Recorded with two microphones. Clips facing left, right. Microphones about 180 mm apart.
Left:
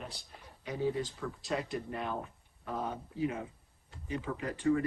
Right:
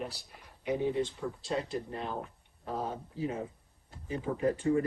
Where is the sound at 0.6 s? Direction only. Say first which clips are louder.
Right 3 dB; 20° right (ahead or behind).